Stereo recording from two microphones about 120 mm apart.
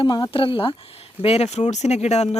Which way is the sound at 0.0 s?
45° left (ahead or behind).